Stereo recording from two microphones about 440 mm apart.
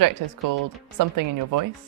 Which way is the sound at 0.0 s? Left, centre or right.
Right.